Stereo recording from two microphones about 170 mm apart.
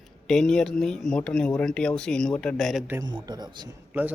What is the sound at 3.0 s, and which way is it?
Speech, 25° right (ahead or behind).